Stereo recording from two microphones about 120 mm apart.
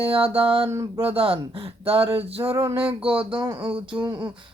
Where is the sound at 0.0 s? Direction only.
50° right (ahead or behind).